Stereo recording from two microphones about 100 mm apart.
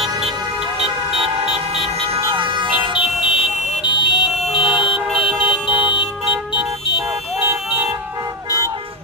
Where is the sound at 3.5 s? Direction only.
90° left.